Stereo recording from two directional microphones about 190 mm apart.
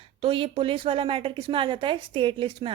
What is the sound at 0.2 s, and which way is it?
A woman's voice, 30° right (ahead or behind).